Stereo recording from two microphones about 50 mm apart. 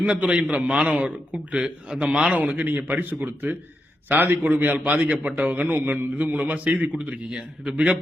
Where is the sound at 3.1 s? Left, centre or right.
Right.